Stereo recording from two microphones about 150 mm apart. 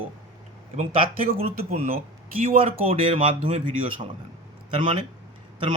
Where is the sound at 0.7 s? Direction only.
45° right (ahead or behind).